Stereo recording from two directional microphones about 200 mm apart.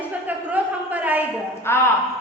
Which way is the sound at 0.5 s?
5° right (ahead or behind).